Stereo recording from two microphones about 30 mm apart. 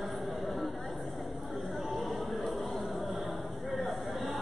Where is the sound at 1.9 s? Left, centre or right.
Centre.